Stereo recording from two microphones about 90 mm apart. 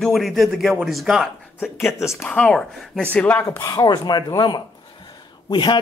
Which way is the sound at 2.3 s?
15° left (ahead or behind).